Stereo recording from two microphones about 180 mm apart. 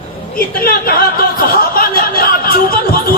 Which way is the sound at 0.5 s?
55° left (ahead or behind).